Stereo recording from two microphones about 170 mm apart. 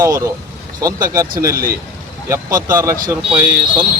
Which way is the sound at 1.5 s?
60° right (ahead or behind).